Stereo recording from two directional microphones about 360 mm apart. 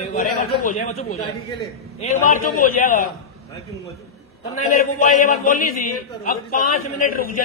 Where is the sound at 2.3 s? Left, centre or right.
Left.